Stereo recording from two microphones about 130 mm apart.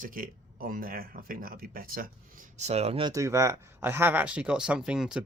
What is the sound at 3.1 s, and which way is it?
Speech, 25° right (ahead or behind).